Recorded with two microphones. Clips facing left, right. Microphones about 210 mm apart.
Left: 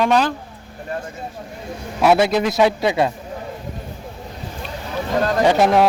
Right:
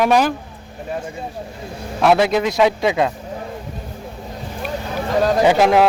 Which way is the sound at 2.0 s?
Centre (ahead or behind).